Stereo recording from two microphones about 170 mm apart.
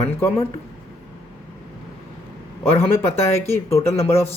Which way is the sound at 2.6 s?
15° left (ahead or behind).